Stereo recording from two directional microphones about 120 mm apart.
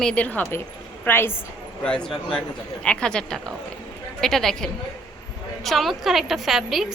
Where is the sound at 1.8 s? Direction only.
10° left (ahead or behind).